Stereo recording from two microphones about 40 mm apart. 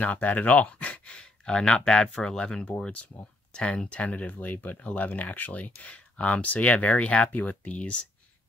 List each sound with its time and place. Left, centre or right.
0.0 s speech: left
4.1 s speech: left
4.7 s speech: left